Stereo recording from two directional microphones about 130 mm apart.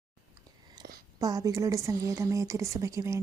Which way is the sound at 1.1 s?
25° right (ahead or behind).